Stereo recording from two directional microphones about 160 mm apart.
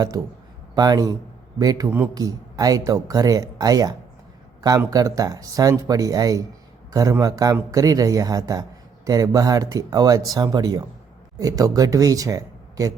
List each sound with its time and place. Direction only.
0.8 s speech: 25° right (ahead or behind)